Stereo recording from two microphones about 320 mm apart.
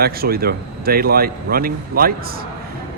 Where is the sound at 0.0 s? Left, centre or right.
Right.